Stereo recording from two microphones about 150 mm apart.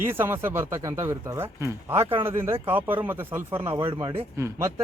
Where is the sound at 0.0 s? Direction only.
15° right (ahead or behind).